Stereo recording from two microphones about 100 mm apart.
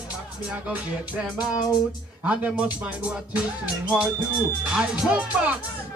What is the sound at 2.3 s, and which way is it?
Speech, 10° right (ahead or behind).